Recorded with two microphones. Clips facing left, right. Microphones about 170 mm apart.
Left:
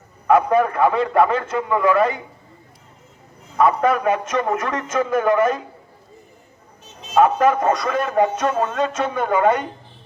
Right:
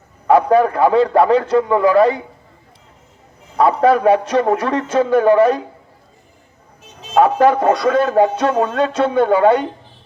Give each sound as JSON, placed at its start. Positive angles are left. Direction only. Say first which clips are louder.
{"t": 0.3, "sound": "speech", "louder": "right 4 dB", "side_deg": -30}
{"t": 3.6, "sound": "speech", "louder": "right 4 dB", "side_deg": -30}
{"t": 7.1, "sound": "speech", "louder": "right 3 dB", "side_deg": -30}